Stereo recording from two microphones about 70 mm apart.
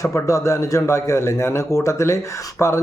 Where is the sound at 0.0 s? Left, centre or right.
Left.